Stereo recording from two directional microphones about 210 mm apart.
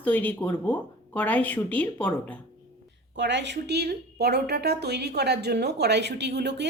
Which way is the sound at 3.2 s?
55° right (ahead or behind).